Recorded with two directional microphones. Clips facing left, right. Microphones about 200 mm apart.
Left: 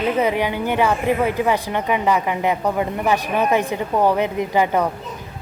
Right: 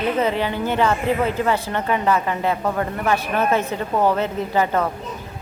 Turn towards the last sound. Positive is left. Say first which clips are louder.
# left 2 dB
turn(degrees=15)  # may be behind; listen again after turning